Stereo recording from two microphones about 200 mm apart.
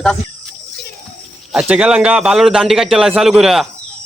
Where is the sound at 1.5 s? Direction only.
5° right (ahead or behind).